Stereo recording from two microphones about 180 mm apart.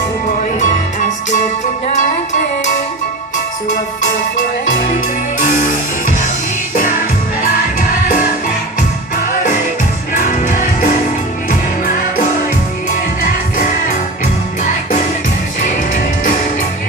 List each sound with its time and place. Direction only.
0.6 s music: 45° left (ahead or behind)
4.9 s music: 45° left (ahead or behind)
7.4 s music: 50° left (ahead or behind)
10.1 s music: 45° left (ahead or behind)